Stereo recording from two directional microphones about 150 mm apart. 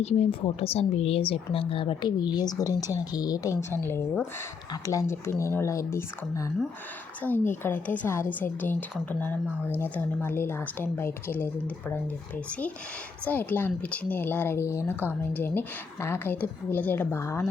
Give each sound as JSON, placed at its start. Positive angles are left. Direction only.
{"t": 0.0, "sound": "speech", "side_deg": 45}
{"t": 13.2, "sound": "speech", "side_deg": 10}